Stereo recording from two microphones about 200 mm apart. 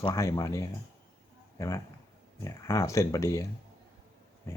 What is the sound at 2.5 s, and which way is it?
Speech, 15° left (ahead or behind).